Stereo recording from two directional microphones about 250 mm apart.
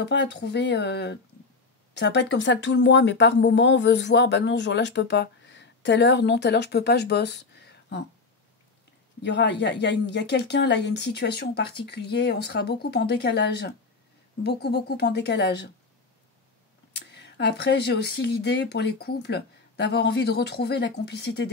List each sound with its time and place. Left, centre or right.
0.0 s speech: left
9.2 s speech: left
16.9 s speech: left